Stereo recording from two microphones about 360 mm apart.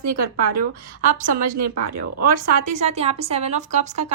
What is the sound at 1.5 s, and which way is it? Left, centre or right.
Speech, right.